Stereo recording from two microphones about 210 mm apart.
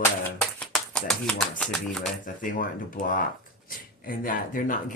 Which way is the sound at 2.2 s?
40° left (ahead or behind).